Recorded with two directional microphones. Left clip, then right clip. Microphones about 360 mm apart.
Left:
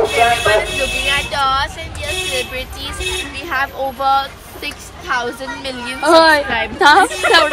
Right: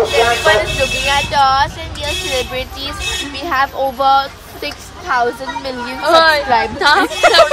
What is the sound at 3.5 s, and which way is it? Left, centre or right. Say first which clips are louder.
Speech: right 4 dB; centre.